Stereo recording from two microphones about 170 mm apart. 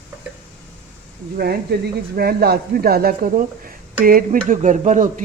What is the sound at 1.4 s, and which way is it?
Speech, 70° right (ahead or behind).